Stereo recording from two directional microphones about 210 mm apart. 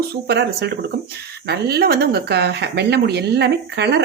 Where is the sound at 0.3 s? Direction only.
55° right (ahead or behind).